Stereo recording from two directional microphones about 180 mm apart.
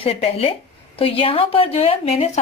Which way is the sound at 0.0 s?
30° left (ahead or behind).